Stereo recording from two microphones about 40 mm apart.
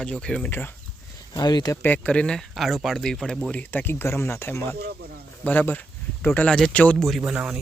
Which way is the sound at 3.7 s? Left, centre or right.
Left.